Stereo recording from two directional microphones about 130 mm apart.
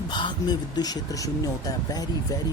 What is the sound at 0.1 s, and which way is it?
Speech, 35° left (ahead or behind).